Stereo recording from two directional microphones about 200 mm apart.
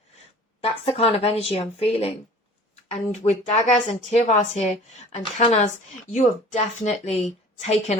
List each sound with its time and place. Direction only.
0.6 s speech: 30° left (ahead or behind)
3.2 s speech: 35° left (ahead or behind)